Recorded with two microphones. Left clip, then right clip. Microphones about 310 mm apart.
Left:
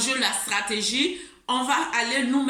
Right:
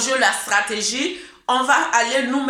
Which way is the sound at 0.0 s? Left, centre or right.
Centre.